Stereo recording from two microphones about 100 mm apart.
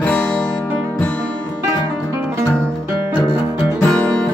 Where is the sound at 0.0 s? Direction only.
15° left (ahead or behind).